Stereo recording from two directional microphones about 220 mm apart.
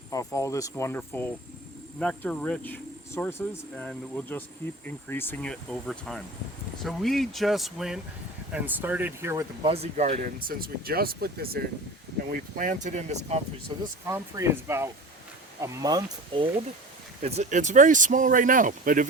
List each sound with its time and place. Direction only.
0.1 s speech: 15° left (ahead or behind); by 9.5 s 10° right (ahead or behind)
9.6 s speech: 25° right (ahead or behind)
10.4 s speech: 40° right (ahead or behind)
13.7 s speech: 20° right (ahead or behind); by 19.0 s 35° right (ahead or behind)